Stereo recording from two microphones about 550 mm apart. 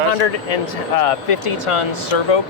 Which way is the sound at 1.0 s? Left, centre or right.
Left.